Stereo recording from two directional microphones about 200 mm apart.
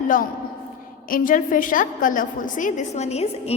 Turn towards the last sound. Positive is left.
turn(degrees=30)  # may be behind; listen again after turning